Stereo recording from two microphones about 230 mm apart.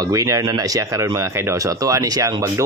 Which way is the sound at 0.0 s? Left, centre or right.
Centre.